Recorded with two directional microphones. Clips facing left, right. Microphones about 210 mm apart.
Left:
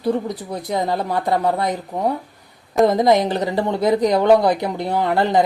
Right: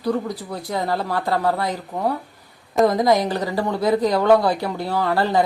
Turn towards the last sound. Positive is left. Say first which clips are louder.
# left 2 dB
turn(degrees=20)  # may be behind; listen again after turning